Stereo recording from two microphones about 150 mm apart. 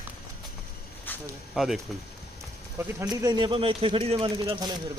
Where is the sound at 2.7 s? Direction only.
25° right (ahead or behind).